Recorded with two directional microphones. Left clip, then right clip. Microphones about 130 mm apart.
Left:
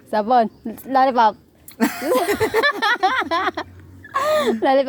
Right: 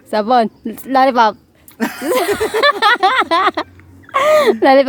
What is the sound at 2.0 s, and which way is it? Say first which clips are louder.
A woman's voice: right 4 dB; 40° right (ahead or behind).